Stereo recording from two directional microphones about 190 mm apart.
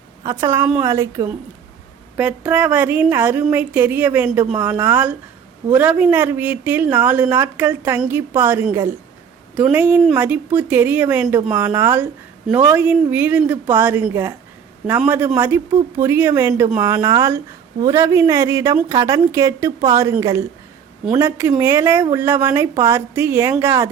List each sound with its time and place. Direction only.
0.3 s a woman's voice: 15° right (ahead or behind)